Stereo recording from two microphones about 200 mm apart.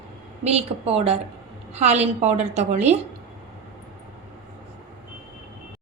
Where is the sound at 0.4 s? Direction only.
30° right (ahead or behind).